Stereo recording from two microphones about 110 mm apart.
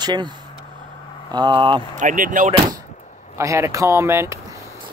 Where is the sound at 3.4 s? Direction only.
30° right (ahead or behind).